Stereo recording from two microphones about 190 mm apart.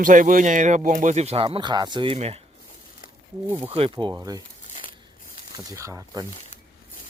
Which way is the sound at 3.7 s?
30° right (ahead or behind).